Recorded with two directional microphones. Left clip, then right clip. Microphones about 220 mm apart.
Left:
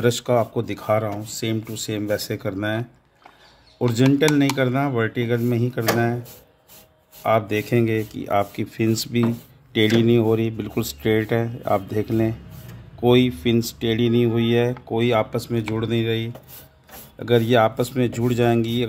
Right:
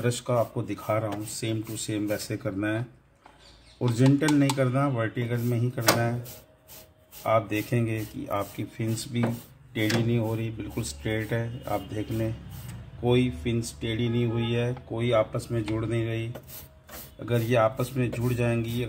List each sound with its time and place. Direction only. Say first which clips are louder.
0.0 s speech: left 7 dB; 50° left (ahead or behind)
3.8 s speech: left 6 dB; 45° left (ahead or behind)
7.2 s speech: left 5 dB; 45° left (ahead or behind)
17.3 s speech: left 7 dB; 55° left (ahead or behind)